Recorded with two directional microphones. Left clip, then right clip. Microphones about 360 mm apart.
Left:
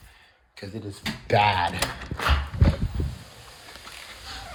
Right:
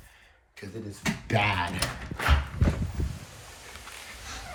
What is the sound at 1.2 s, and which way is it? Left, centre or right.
Speech, centre.